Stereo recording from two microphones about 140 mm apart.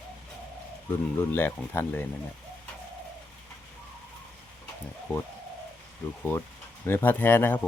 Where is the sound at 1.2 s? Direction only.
15° left (ahead or behind).